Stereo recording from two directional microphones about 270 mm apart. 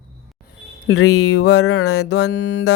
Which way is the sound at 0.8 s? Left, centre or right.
Left.